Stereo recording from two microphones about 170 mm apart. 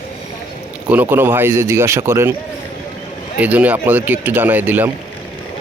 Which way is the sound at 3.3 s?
10° right (ahead or behind).